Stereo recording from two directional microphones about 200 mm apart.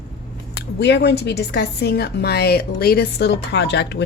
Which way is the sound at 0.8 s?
60° left (ahead or behind).